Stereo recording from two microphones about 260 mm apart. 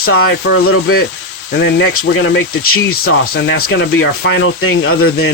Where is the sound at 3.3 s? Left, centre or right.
Left.